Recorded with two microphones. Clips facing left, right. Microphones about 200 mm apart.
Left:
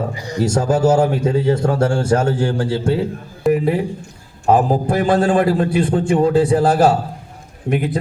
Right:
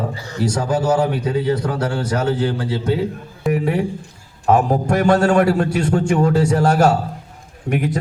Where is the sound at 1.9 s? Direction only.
50° left (ahead or behind).